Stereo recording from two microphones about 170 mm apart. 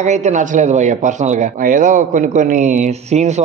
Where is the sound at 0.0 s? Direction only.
45° right (ahead or behind).